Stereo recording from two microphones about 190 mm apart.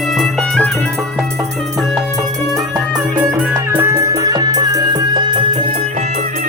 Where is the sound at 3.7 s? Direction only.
10° right (ahead or behind).